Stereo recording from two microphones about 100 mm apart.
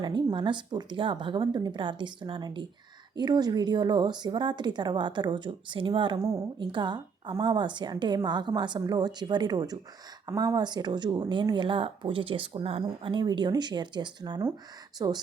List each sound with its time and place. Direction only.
0.0 s a woman's voice: 50° right (ahead or behind)
3.2 s a woman's voice: 45° right (ahead or behind); by 12.8 s 65° right (ahead or behind)
13.0 s a woman's voice: 55° right (ahead or behind)